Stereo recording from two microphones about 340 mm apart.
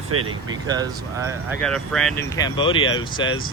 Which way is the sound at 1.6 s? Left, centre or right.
Centre.